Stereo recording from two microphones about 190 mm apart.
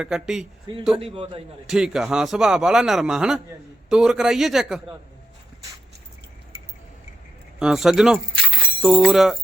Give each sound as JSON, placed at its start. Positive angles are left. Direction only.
{"t": 0.0, "sound": "a man's voice", "side_deg": -5}
{"t": 0.9, "sound": "a man's voice", "side_deg": -30}
{"t": 1.6, "sound": "a man's voice", "side_deg": -5}
{"t": 7.6, "sound": "a man's voice", "side_deg": 0}